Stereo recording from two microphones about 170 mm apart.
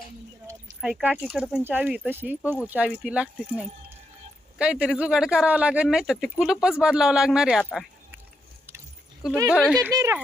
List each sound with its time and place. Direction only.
0.8 s speech: 5° right (ahead or behind)
9.5 s speech: 5° left (ahead or behind)
9.8 s speech: 15° right (ahead or behind)